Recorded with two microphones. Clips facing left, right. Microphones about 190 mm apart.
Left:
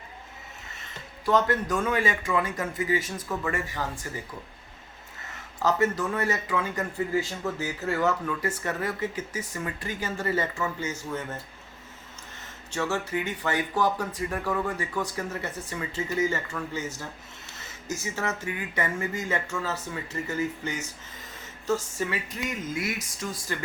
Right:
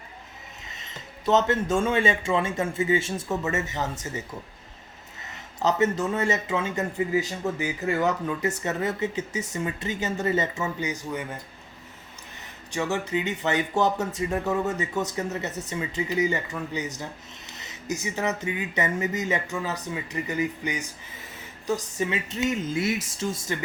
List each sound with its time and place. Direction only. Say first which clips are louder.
0.6 s speech: right 3 dB; 20° right (ahead or behind)
5.2 s speech: right 2 dB; 20° right (ahead or behind)
12.4 s speech: right 1 dB; 15° right (ahead or behind)